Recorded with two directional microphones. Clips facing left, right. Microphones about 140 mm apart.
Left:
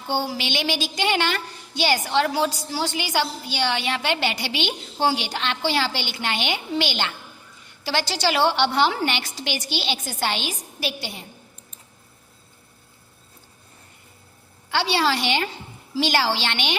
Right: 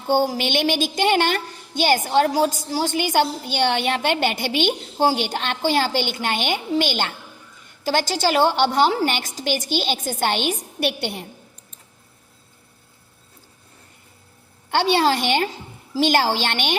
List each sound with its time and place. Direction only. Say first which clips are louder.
0.1 s a child's voice: right 6 dB; 45° right (ahead or behind)
14.7 s a child's voice: right 4 dB; 50° right (ahead or behind)